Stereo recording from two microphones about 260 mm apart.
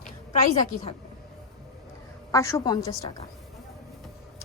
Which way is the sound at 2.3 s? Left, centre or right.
Centre.